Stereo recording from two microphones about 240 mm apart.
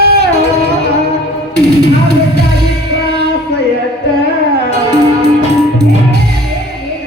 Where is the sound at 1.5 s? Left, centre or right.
Right.